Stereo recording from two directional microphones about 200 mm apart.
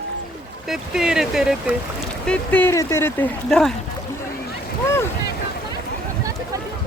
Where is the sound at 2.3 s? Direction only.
10° left (ahead or behind).